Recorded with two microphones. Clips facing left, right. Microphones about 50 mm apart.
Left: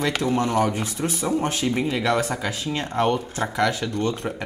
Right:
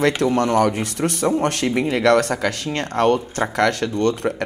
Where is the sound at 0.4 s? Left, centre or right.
Right.